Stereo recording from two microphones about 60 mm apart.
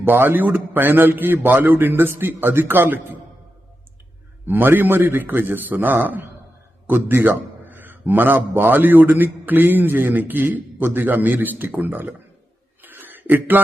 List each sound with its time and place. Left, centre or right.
0.0 s a man's voice: right
4.4 s a man's voice: right
12.8 s a sound: right